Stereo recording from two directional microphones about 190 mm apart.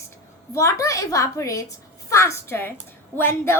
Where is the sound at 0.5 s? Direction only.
15° left (ahead or behind).